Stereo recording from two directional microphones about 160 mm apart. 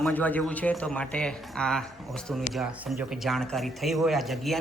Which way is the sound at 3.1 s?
Centre (ahead or behind).